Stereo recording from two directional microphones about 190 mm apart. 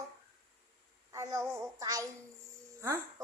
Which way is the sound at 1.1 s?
20° right (ahead or behind).